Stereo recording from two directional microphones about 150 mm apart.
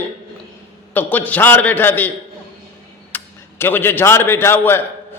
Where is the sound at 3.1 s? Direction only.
15° left (ahead or behind).